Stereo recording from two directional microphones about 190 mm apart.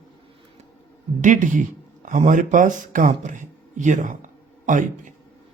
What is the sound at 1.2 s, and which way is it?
Speech, 40° right (ahead or behind).